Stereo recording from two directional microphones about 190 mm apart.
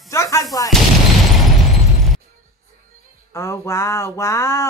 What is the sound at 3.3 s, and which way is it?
Speech, 15° left (ahead or behind).